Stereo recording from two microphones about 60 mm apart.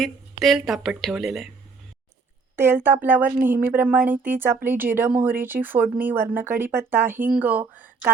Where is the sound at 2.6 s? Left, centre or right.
Right.